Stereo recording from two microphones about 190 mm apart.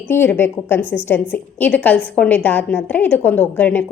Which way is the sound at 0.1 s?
10° left (ahead or behind).